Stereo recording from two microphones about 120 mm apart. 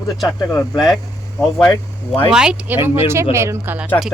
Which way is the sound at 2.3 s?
5° right (ahead or behind).